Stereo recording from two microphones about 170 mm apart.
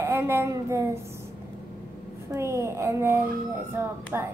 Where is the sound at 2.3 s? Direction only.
15° right (ahead or behind).